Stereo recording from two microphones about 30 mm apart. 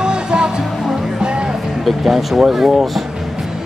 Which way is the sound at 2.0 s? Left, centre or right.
Centre.